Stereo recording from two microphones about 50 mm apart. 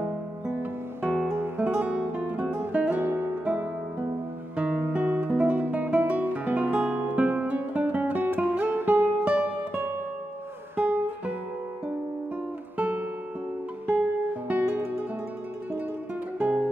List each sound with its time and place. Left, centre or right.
1.1 s music: centre; by 4.1 s right
4.6 s guitar: right
8.4 s music: right
9.2 s music: right
10.8 s music: right
12.7 s music: right
14.5 s music: right
16.3 s music: right